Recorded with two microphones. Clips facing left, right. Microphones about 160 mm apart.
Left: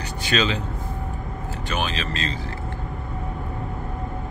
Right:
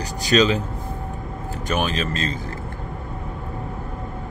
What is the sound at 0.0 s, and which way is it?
Vehicle, 40° right (ahead or behind).